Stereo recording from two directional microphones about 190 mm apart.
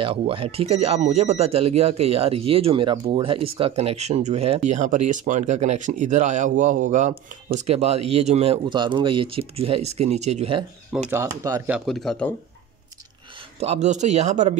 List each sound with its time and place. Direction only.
0.0 s speech: 30° right (ahead or behind)
11.1 s speech: 15° right (ahead or behind)
11.7 s speech: centre (ahead or behind)
13.6 s speech: 35° right (ahead or behind)